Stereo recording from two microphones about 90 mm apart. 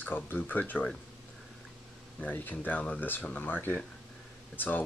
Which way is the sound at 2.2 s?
20° left (ahead or behind).